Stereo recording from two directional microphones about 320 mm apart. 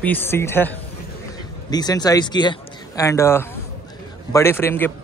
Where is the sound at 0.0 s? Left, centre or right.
Centre.